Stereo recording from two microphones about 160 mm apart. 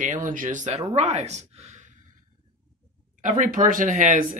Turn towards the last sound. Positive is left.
turn(degrees=-50)  # may be behind; listen again after turning